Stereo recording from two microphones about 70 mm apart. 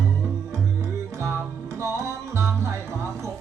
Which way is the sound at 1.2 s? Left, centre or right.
Right.